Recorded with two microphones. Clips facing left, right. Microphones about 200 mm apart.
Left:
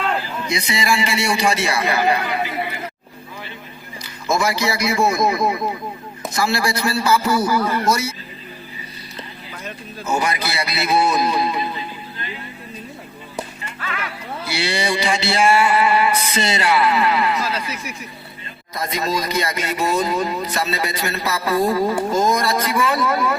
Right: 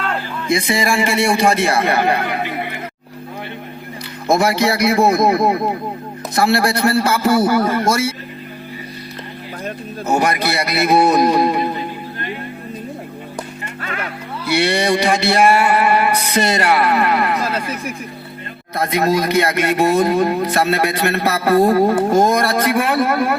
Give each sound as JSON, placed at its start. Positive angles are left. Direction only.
{"t": 0.4, "sound": "a man's voice", "side_deg": -50}
{"t": 4.3, "sound": "speech", "side_deg": -55}
{"t": 9.6, "sound": "speech", "side_deg": -60}
{"t": 13.8, "sound": "music", "side_deg": -40}
{"t": 14.4, "sound": "mantra", "side_deg": -60}
{"t": 18.7, "sound": "speech", "side_deg": -60}